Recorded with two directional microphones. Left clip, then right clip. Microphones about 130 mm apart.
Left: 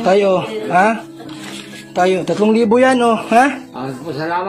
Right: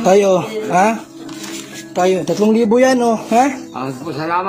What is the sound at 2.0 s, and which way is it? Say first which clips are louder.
A man's voice: even; 35° right (ahead or behind).